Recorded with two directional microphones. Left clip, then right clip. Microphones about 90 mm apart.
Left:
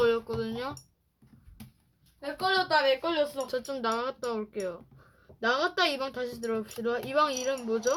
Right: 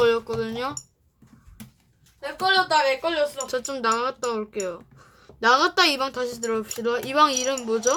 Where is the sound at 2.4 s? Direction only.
50° left (ahead or behind).